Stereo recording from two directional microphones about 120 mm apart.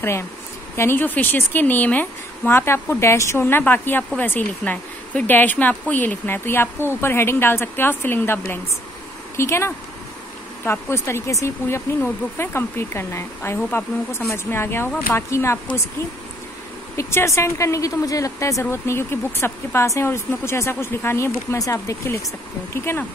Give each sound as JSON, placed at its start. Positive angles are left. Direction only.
{"t": 0.7, "sound": "a woman's voice", "side_deg": 15}
{"t": 16.9, "sound": "speech", "side_deg": 25}